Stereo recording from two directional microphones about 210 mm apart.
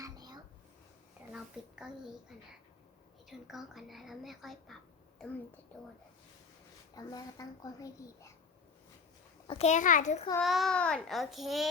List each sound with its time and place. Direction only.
0.0 s a sound: 20° right (ahead or behind)
1.3 s a sound: 5° right (ahead or behind)
3.2 s a woman's voice: centre (ahead or behind)
6.9 s a child's voice: 15° left (ahead or behind)
9.5 s a child's voice: 30° left (ahead or behind)
10.4 s a woman's voice: centre (ahead or behind)